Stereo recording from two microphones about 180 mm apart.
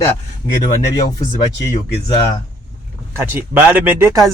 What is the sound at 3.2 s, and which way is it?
Speech, 15° right (ahead or behind).